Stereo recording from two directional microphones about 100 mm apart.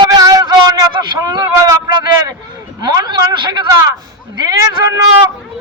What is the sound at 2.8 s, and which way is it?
Speech, 45° right (ahead or behind).